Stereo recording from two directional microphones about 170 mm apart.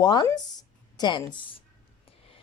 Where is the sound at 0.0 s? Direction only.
25° left (ahead or behind).